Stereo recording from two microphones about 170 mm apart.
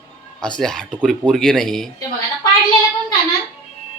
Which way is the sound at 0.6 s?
5° left (ahead or behind).